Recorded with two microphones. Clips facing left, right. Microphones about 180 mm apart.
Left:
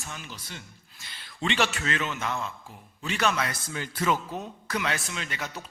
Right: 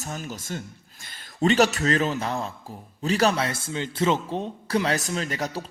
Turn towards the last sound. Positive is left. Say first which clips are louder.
# right 8 dB
turn(degrees=-40)  # may be behind; listen again after turning